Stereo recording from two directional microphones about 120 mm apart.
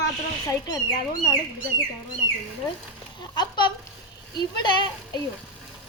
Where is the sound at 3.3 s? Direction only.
35° left (ahead or behind).